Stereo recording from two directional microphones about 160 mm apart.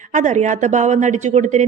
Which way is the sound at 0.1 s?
50° right (ahead or behind).